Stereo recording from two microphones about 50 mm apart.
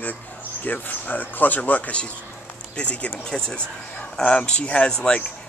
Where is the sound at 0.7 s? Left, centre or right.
Left.